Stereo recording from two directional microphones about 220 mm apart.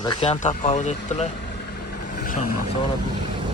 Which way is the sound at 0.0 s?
20° left (ahead or behind).